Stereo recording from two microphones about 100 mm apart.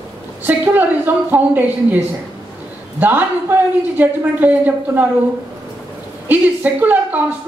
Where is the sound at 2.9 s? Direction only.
20° right (ahead or behind).